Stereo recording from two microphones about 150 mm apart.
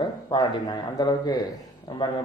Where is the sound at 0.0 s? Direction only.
30° left (ahead or behind).